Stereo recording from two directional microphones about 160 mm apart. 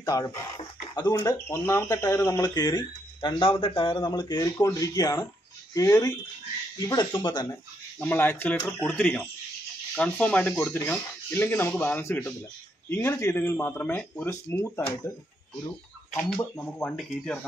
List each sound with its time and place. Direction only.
0.0 s speech: 20° left (ahead or behind)
8.0 s speech: 10° left (ahead or behind)
16.3 s speech: 5° left (ahead or behind)